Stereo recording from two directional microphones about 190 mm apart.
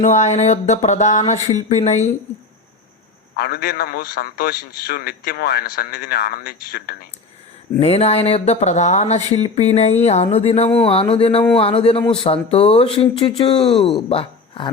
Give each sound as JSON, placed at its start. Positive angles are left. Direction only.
{"t": 0.0, "sound": "speech", "side_deg": 40}
{"t": 3.3, "sound": "a man's voice", "side_deg": 50}
{"t": 7.8, "sound": "speech", "side_deg": 35}